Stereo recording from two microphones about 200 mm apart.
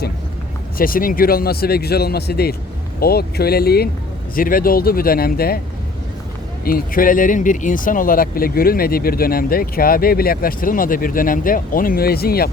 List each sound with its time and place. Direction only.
0.8 s speech: 45° left (ahead or behind)
6.7 s speech: 45° left (ahead or behind)